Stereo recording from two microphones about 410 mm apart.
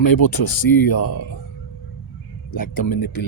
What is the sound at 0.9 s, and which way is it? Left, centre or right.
Speech, left.